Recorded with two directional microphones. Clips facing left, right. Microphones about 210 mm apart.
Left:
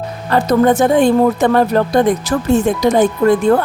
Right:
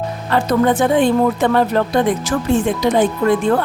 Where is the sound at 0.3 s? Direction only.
40° left (ahead or behind).